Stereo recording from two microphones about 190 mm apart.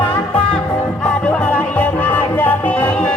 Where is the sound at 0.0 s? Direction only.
5° left (ahead or behind).